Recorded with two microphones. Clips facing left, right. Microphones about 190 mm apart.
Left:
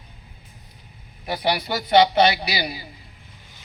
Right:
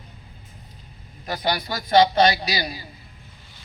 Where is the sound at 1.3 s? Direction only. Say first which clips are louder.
Left 2 dB; 10° left (ahead or behind).